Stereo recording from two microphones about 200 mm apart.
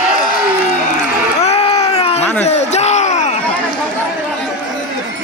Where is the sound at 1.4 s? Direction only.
30° left (ahead or behind).